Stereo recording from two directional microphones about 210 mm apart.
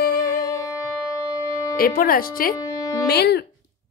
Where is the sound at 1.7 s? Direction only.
45° left (ahead or behind).